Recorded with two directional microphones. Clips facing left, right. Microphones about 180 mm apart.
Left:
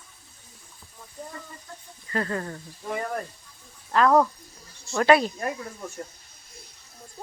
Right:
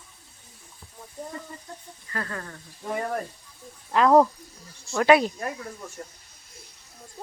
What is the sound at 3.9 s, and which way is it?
Speech, 20° right (ahead or behind).